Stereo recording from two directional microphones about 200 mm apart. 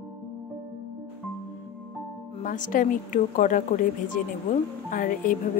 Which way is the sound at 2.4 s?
40° left (ahead or behind).